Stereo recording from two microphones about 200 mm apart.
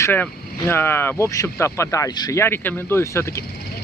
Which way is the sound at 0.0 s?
10° left (ahead or behind).